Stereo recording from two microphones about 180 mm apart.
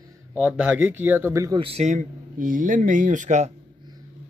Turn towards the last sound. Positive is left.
turn(degrees=-40)  # may be behind; listen again after turning